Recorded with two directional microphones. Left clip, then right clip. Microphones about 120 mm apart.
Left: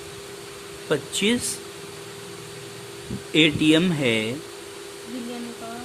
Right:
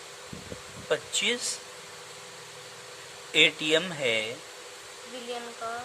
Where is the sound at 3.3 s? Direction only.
15° left (ahead or behind).